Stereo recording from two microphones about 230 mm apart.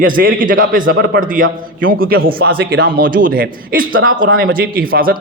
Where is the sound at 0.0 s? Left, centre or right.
Right.